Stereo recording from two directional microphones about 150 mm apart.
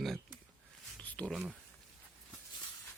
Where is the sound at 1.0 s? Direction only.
10° left (ahead or behind).